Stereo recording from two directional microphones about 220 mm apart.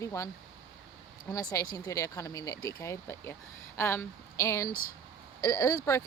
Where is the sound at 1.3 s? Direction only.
15° left (ahead or behind).